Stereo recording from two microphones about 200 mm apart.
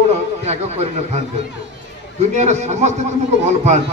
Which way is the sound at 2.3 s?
35° right (ahead or behind).